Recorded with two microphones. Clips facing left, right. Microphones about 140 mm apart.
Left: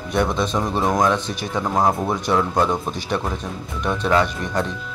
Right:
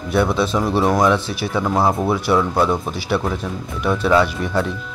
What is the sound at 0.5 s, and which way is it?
A man's voice, 10° right (ahead or behind).